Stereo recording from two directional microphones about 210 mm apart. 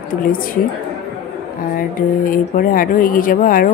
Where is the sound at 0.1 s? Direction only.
40° left (ahead or behind).